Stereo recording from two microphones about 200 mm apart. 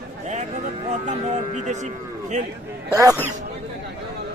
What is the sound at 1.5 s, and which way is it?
Speech, 35° right (ahead or behind).